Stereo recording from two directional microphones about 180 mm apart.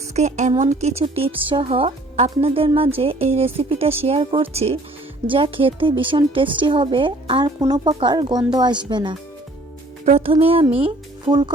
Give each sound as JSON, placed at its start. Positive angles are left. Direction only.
{"t": 0.1, "sound": "speech", "side_deg": -40}